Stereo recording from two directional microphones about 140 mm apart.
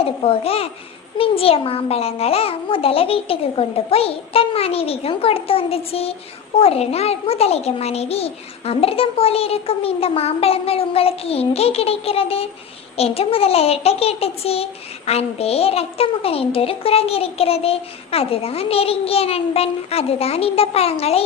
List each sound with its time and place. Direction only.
0.0 s a child's voice: 45° left (ahead or behind)